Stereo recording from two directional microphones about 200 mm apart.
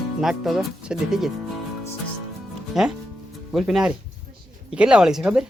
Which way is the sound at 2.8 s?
Centre (ahead or behind).